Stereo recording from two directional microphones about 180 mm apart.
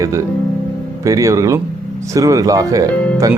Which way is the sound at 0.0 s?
15° right (ahead or behind).